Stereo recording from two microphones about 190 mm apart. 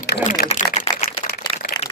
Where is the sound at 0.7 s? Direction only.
40° left (ahead or behind).